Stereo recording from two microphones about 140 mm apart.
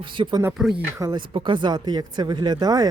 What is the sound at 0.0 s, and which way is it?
Speech, 35° right (ahead or behind).